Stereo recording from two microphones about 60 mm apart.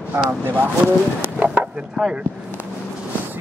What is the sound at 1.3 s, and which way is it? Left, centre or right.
Chop, right.